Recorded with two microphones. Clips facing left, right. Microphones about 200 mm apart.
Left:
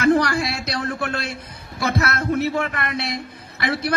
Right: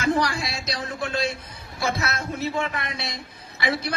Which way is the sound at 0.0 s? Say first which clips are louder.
Left 6 dB; 65° left (ahead or behind).